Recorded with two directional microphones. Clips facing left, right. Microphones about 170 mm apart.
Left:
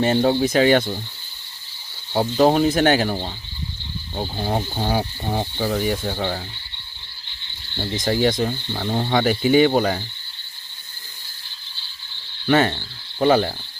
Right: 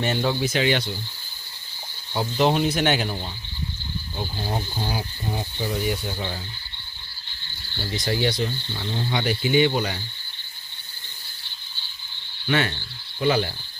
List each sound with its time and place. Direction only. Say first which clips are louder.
0.0 s speech: left 6 dB; 30° left (ahead or behind)
2.1 s speech: left 5 dB; 40° left (ahead or behind); by 5.8 s 60° left (ahead or behind)
5.9 s speech: left 5 dB; 50° left (ahead or behind)
7.9 s speech: left 5 dB; 45° left (ahead or behind)
12.5 s speech: left 6 dB; 40° left (ahead or behind)
13.1 s cricket: left 5 dB; 40° left (ahead or behind)